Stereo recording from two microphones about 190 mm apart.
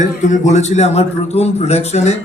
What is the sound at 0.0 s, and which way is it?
A man's voice, 40° left (ahead or behind).